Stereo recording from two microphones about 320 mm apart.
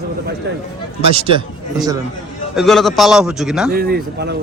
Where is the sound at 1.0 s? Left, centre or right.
Centre.